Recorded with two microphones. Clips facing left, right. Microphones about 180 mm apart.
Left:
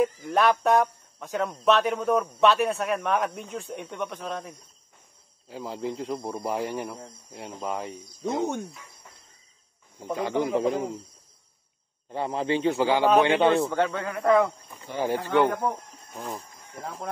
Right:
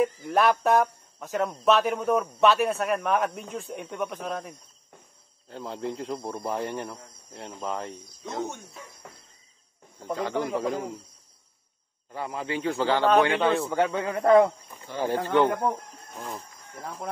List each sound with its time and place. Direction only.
0.0 s speech: centre (ahead or behind)
9.9 s speech: 15° left (ahead or behind)
12.1 s a man's voice: 30° left (ahead or behind); by 13.2 s 10° left (ahead or behind)
13.2 s a man's voice: 25° left (ahead or behind)
13.5 s speech: centre (ahead or behind)
13.7 s a man's voice: 10° right (ahead or behind)
14.1 s speech: 30° right (ahead or behind)
14.8 s speech: 15° left (ahead or behind)